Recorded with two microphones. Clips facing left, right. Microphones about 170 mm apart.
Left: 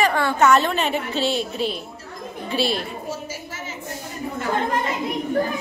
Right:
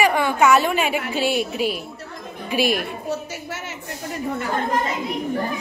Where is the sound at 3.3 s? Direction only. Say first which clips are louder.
Right 2 dB; 70° right (ahead or behind).